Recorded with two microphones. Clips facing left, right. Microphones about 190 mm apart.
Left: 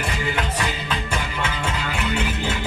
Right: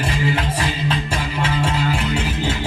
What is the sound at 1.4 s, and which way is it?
Music, 35° right (ahead or behind).